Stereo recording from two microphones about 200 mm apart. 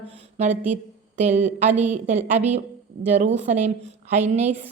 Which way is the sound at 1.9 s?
35° right (ahead or behind).